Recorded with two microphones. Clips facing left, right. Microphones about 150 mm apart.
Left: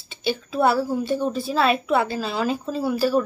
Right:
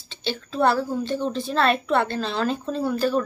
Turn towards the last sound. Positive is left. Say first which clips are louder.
# left 2 dB
turn(degrees=5)  # may be behind; listen again after turning